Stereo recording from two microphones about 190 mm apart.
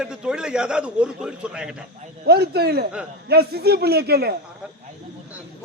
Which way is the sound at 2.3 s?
55° right (ahead or behind).